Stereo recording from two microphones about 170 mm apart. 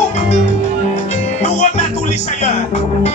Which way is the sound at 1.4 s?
45° left (ahead or behind).